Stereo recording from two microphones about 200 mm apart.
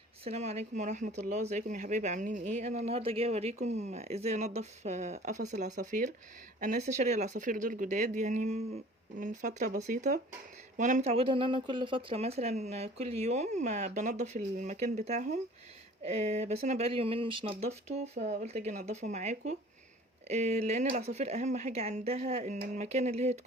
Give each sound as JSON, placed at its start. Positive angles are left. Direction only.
{"t": 0.3, "sound": "speech", "side_deg": -35}